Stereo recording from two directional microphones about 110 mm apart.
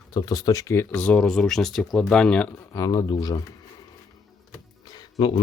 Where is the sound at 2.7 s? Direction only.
35° left (ahead or behind).